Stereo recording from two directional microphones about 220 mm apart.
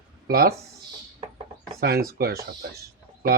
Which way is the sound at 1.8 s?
45° right (ahead or behind).